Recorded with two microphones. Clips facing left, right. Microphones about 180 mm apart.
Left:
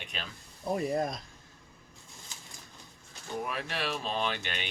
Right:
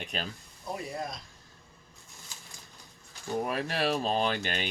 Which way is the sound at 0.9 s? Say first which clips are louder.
Left 6 dB; 50° left (ahead or behind).